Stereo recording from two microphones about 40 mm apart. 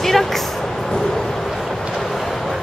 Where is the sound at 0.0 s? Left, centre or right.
Centre.